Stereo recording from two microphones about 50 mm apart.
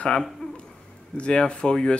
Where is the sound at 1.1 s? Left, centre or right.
Centre.